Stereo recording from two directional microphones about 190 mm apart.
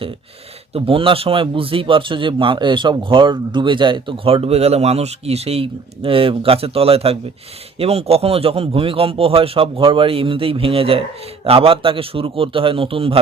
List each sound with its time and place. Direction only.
0.7 s a man's voice: 30° right (ahead or behind)